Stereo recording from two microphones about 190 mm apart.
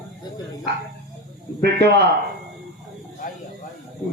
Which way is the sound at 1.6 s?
60° right (ahead or behind).